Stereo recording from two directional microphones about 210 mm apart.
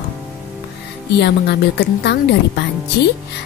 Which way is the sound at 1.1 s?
50° left (ahead or behind).